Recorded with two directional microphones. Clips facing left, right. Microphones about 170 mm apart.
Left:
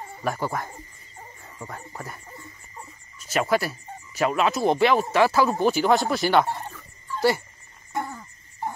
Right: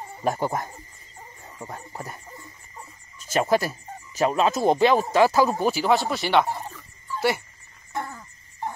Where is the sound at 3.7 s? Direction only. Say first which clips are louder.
Right 1 dB; 35° right (ahead or behind).